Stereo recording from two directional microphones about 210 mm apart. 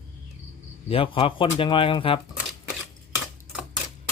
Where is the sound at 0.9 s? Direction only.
25° left (ahead or behind).